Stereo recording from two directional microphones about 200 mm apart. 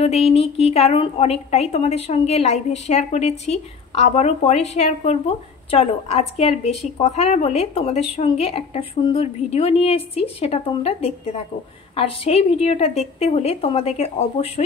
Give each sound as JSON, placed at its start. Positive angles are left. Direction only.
{"t": 0.0, "sound": "a woman's voice", "side_deg": 30}